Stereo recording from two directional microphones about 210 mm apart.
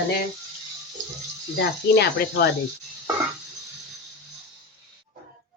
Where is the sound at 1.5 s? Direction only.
50° left (ahead or behind).